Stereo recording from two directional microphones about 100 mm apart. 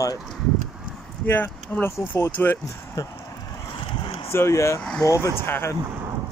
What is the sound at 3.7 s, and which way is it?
Vehicle, 55° left (ahead or behind).